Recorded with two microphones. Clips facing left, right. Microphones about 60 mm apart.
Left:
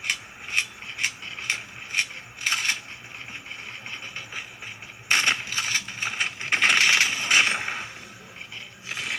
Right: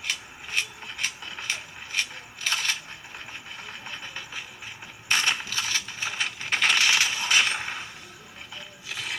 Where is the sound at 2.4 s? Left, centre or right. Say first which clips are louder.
Left 2 dB; left.